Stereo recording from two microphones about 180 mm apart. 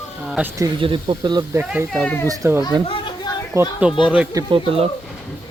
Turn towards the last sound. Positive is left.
turn(degrees=-30)  # may be behind; listen again after turning